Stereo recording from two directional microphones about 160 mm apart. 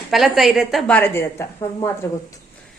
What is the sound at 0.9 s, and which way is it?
Speech, 15° left (ahead or behind).